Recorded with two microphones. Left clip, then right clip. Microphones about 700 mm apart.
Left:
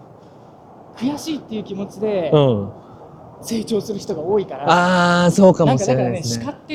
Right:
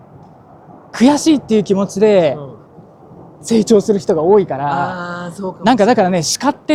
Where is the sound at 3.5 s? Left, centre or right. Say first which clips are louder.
Right 11 dB; right.